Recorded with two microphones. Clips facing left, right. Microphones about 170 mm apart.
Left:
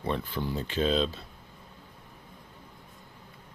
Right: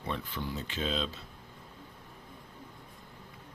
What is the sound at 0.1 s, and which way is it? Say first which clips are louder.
Speech: left 5 dB; 35° left (ahead or behind).